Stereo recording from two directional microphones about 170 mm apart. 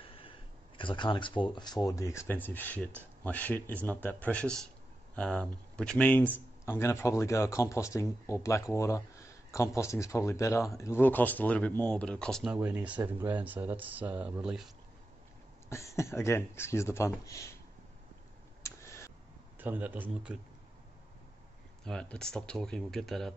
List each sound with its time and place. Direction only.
0.0 s speech: 30° left (ahead or behind); by 12.4 s 5° left (ahead or behind)
12.4 s speech: 10° right (ahead or behind)
15.7 s speech: 15° left (ahead or behind)
18.6 s tick: 15° left (ahead or behind)
19.6 s speech: 10° right (ahead or behind)
21.8 s speech: 5° left (ahead or behind)